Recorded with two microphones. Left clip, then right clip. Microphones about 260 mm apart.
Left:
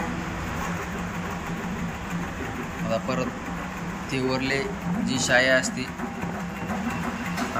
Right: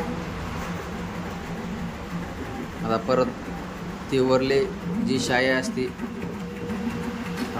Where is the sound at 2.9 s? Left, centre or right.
Centre.